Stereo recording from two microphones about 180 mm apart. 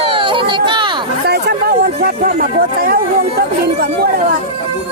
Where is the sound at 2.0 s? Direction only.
50° right (ahead or behind).